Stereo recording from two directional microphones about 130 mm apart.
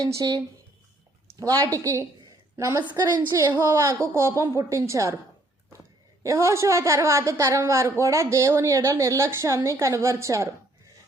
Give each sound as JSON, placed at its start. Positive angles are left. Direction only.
{"t": 0.0, "sound": "a woman's voice", "side_deg": -25}
{"t": 6.2, "sound": "a woman's voice", "side_deg": -20}